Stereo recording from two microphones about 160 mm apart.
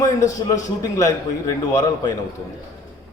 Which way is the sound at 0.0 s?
20° left (ahead or behind).